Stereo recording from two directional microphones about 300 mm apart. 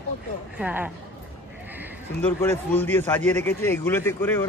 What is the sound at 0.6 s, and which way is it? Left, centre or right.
Speech, centre.